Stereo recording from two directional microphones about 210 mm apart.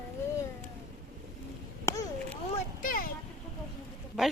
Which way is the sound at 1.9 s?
15° left (ahead or behind).